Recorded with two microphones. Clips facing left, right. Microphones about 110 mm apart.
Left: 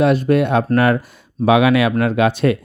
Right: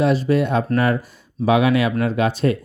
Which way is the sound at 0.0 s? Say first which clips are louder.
Left 3 dB; 55° left (ahead or behind).